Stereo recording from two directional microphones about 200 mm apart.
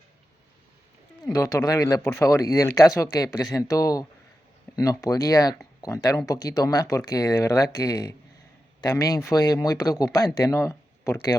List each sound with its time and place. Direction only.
1.2 s speech: 20° left (ahead or behind)